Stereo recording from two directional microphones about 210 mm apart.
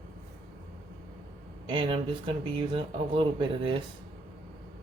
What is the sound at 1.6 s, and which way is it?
Speech, 25° right (ahead or behind).